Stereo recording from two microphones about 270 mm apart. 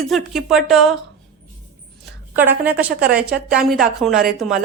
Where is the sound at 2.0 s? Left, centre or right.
Centre.